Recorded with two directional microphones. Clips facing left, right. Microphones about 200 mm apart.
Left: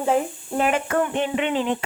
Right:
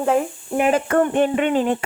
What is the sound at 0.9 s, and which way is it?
Speech, 50° right (ahead or behind).